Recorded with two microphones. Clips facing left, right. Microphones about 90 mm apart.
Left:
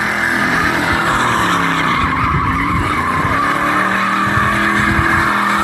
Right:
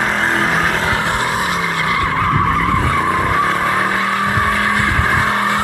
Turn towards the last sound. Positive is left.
turn(degrees=20)  # may be behind; listen again after turning